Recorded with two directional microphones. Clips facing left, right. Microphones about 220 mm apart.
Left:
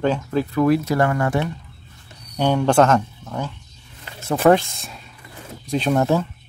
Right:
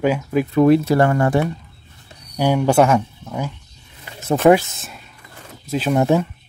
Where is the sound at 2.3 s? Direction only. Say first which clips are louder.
Right 1 dB; 10° right (ahead or behind).